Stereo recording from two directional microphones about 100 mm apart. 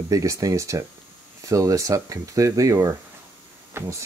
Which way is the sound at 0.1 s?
35° right (ahead or behind).